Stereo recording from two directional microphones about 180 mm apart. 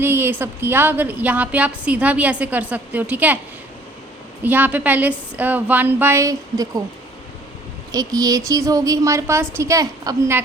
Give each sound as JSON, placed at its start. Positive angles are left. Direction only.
{"t": 0.0, "sound": "a woman's voice", "side_deg": -10}
{"t": 4.4, "sound": "a woman's voice", "side_deg": -10}
{"t": 7.9, "sound": "a woman's voice", "side_deg": -20}